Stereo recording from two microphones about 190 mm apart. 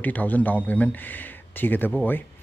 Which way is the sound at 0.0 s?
10° left (ahead or behind).